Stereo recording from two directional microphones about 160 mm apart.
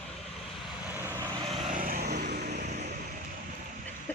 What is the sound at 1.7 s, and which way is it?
Vehicle, 60° right (ahead or behind).